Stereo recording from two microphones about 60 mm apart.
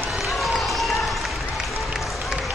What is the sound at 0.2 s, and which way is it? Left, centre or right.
Run, centre.